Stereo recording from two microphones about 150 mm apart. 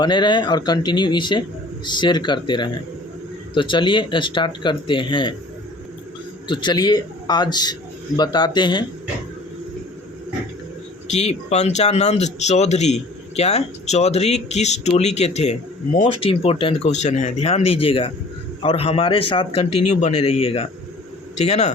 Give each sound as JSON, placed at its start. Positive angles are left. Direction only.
{"t": 0.0, "sound": "speech", "side_deg": 30}
{"t": 6.5, "sound": "a man's voice", "side_deg": 30}
{"t": 11.1, "sound": "speech", "side_deg": 50}
{"t": 16.1, "sound": "speech", "side_deg": 40}